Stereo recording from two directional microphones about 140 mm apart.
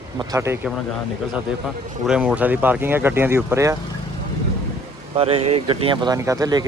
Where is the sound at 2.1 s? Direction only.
10° right (ahead or behind).